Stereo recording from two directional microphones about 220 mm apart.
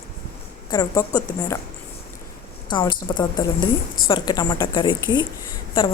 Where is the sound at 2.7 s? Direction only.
20° left (ahead or behind).